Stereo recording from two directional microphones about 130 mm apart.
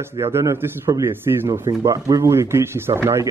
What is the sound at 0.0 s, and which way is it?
Speech, 20° right (ahead or behind).